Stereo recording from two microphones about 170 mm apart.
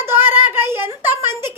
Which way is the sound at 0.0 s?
15° right (ahead or behind).